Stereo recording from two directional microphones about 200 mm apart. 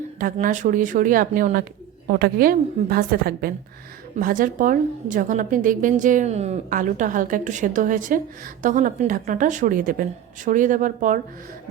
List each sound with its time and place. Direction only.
0.2 s a woman's voice: 40° right (ahead or behind)